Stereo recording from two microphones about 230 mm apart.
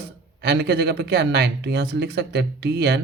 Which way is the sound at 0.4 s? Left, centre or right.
Right.